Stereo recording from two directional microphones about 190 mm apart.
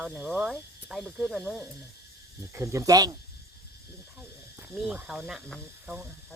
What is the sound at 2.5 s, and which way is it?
Speech, 15° right (ahead or behind).